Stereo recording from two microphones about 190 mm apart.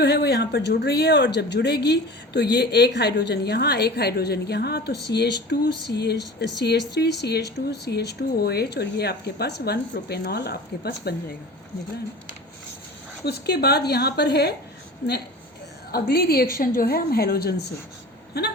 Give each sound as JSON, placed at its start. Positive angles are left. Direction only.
{"t": 0.0, "sound": "speech", "side_deg": 60}
{"t": 13.2, "sound": "speech", "side_deg": 55}
{"t": 15.9, "sound": "speech", "side_deg": 55}